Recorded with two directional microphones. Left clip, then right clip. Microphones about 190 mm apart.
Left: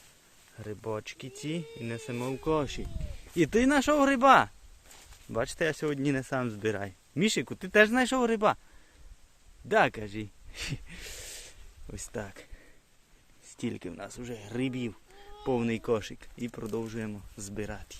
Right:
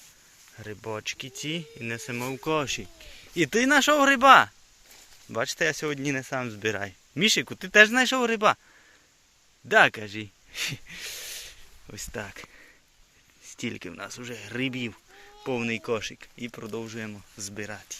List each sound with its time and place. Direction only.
0.5 s speech: 10° left (ahead or behind)
9.6 s speech: 5° left (ahead or behind)
10.5 s a sound: 15° left (ahead or behind)
13.6 s speech: 5° left (ahead or behind)
15.4 s speech: 20° left (ahead or behind)